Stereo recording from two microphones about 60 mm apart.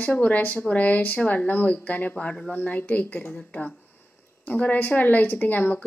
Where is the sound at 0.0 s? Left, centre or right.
Left.